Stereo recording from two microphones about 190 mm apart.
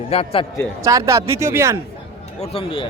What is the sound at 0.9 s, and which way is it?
Speech, 15° right (ahead or behind).